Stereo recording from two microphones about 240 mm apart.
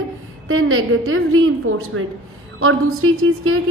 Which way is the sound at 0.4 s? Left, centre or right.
Right.